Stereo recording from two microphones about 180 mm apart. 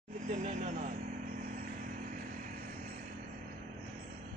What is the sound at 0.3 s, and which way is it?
Vehicle, 45° right (ahead or behind).